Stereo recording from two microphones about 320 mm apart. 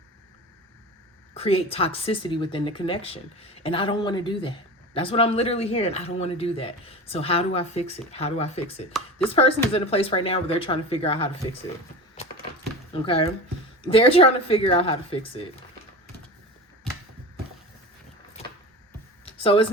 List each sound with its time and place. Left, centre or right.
1.3 s speech: centre
12.9 s speech: centre
19.2 s a sound: centre